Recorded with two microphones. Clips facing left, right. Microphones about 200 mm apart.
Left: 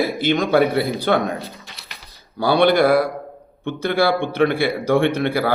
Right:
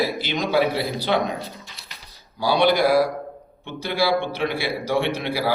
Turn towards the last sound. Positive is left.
turn(degrees=55)  # may be behind; listen again after turning